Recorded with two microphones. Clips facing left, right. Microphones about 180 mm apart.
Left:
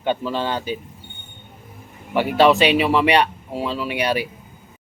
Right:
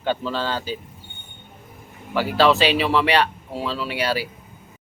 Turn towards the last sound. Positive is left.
turn(degrees=20)  # may be behind; listen again after turning